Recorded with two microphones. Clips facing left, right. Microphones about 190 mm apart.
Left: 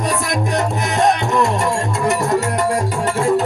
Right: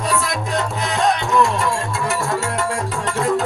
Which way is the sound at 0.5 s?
20° left (ahead or behind).